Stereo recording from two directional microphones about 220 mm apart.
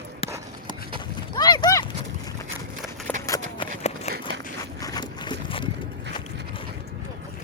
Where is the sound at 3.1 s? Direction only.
5° left (ahead or behind).